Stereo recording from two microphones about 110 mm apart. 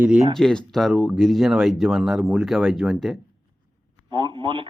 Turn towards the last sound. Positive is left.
turn(degrees=-50)  # may be behind; listen again after turning